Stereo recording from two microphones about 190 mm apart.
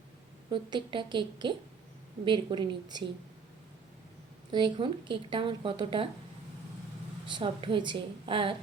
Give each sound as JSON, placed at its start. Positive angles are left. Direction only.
{"t": 0.5, "sound": "a woman's voice", "side_deg": -25}
{"t": 4.5, "sound": "a woman's voice", "side_deg": -25}
{"t": 7.3, "sound": "a woman's voice", "side_deg": -25}